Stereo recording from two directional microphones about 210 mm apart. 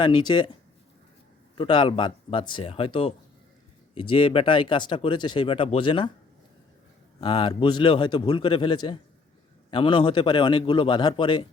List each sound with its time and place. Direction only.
0.0 s speech: 20° left (ahead or behind)
1.5 s speech: 25° left (ahead or behind)
7.2 s speech: 20° left (ahead or behind)